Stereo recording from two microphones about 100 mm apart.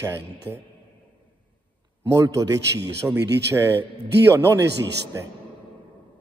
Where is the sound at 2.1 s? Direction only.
35° right (ahead or behind).